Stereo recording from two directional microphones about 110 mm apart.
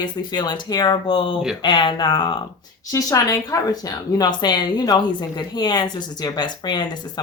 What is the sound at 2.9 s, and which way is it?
A woman's voice, 30° left (ahead or behind).